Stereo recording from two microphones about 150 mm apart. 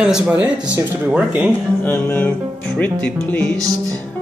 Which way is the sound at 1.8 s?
10° left (ahead or behind).